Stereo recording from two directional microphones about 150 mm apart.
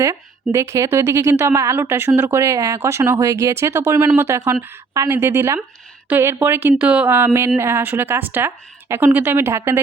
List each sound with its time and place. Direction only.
0.0 s a woman's voice: 20° right (ahead or behind)